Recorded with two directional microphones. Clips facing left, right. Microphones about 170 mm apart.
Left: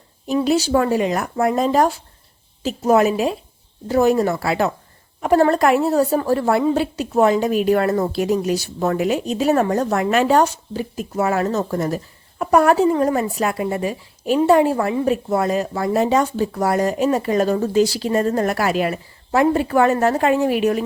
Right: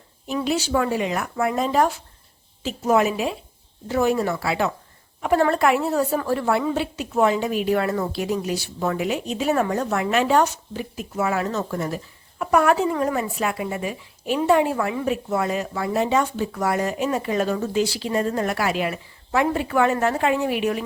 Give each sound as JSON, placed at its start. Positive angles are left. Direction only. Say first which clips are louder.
{"t": 0.3, "sound": "speech", "louder": "left 6 dB", "side_deg": 35}